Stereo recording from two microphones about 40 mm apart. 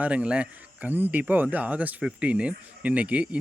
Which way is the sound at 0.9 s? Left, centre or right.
Right.